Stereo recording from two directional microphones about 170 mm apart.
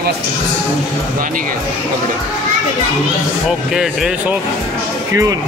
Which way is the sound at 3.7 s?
5° right (ahead or behind).